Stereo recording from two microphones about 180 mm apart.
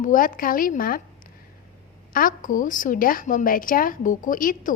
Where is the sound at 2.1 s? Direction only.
50° left (ahead or behind).